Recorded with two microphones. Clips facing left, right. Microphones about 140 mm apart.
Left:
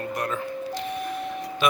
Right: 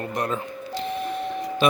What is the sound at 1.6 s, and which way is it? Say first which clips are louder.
Speech: right 3 dB; 30° right (ahead or behind).